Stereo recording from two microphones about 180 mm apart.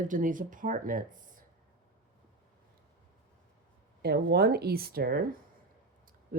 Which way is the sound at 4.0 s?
65° right (ahead or behind).